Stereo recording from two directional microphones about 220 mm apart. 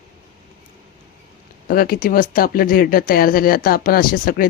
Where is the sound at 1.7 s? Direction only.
40° left (ahead or behind).